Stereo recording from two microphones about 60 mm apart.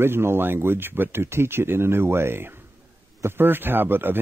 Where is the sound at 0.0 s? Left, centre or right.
Right.